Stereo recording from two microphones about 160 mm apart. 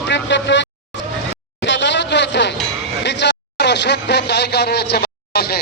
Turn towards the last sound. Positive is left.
turn(degrees=85)